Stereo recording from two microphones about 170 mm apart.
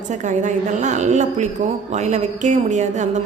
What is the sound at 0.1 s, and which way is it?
A woman's voice, 45° right (ahead or behind).